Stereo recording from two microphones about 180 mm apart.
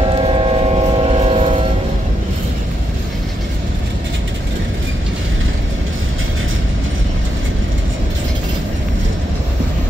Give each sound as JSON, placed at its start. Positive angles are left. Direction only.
{"t": 0.1, "sound": "train", "side_deg": -30}